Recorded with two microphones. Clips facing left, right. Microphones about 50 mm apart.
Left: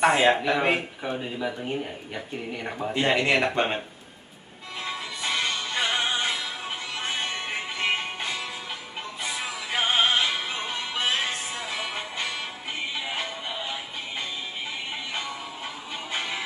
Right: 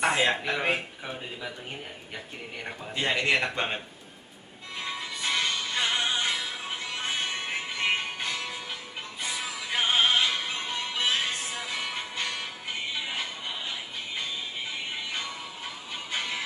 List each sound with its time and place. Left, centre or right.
0.0 s speech: centre
2.9 s speech: centre
3.2 s speech: centre
4.7 s music: centre
6.3 s music: centre
9.7 s music: centre
16.1 s music: centre